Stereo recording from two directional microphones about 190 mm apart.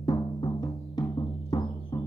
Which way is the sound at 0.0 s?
20° left (ahead or behind).